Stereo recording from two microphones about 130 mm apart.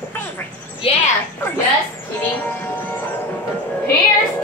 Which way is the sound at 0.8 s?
50° left (ahead or behind).